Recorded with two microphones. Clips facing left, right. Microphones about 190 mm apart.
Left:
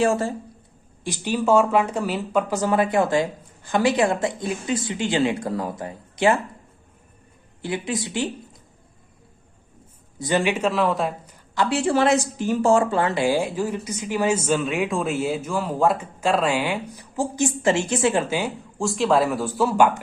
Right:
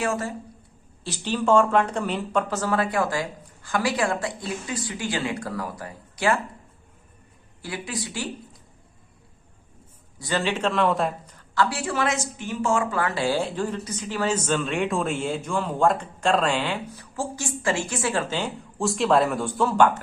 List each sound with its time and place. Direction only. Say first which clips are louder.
0.0 s speech: left 6 dB; 30° left (ahead or behind)
1.0 s speech: left 2 dB; 10° left (ahead or behind)
7.6 s speech: left 6 dB; 20° left (ahead or behind)
10.2 s a woman's voice: left 4 dB; 15° left (ahead or behind); by 11.1 s centre (ahead or behind)
11.5 s a woman's voice: left 4 dB; 20° left (ahead or behind)
18.8 s speech: left 1 dB; centre (ahead or behind)